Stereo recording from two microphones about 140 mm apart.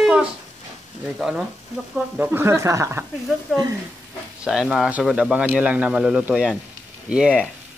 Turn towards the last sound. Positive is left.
turn(degrees=-5)  # may be behind; listen again after turning